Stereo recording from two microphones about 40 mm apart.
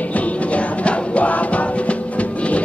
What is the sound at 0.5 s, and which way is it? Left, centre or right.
Music, left.